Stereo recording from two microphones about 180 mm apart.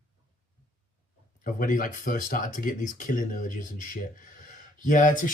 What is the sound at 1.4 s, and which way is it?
Speech, 45° left (ahead or behind).